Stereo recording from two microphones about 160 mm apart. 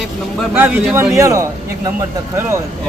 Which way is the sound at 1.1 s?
20° right (ahead or behind).